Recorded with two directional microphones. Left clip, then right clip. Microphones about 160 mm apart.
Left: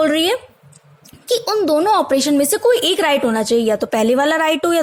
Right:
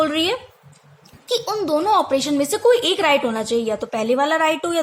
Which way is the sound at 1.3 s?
40° left (ahead or behind).